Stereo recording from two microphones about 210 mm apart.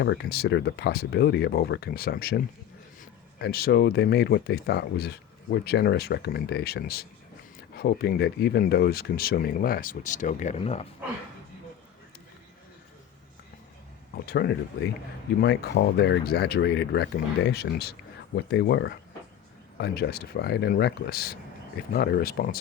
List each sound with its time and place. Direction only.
0.0 s speech: 55° left (ahead or behind); by 10.8 s 35° left (ahead or behind)
14.3 s speech: 50° left (ahead or behind)